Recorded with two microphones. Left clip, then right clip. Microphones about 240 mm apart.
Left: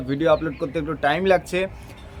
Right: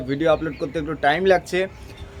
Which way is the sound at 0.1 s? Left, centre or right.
Centre.